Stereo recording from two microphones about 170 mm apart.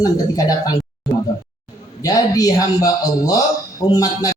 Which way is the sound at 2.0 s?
20° left (ahead or behind).